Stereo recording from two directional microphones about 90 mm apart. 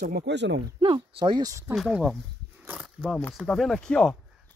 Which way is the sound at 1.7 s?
Centre (ahead or behind).